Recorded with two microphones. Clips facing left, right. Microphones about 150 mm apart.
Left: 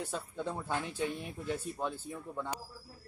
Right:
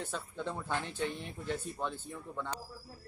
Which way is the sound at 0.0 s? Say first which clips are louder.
Left 1 dB; 10° left (ahead or behind).